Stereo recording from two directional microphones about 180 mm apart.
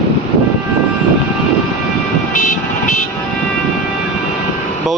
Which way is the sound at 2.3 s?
45° left (ahead or behind).